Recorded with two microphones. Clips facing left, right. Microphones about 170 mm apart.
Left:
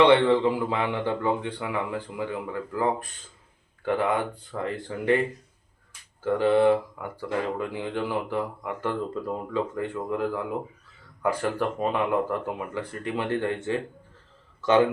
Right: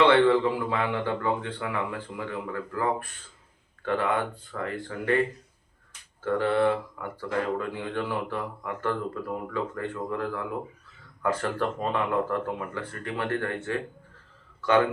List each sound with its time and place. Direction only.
0.0 s speech: 15° left (ahead or behind)
3.8 s speech: 15° left (ahead or behind)
6.2 s speech: 15° left (ahead or behind)